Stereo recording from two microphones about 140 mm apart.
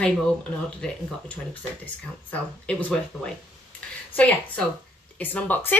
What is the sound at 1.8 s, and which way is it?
Speech, 10° left (ahead or behind).